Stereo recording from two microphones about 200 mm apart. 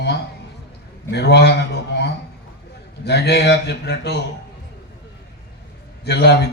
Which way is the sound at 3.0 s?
55° left (ahead or behind).